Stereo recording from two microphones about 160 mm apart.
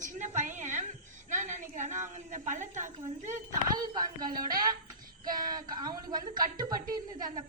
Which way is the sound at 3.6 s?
25° right (ahead or behind).